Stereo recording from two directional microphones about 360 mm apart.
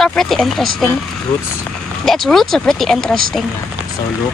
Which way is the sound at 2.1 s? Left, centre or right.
Centre.